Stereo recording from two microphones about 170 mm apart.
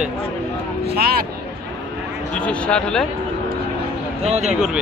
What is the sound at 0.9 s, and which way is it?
Speech, 65° right (ahead or behind).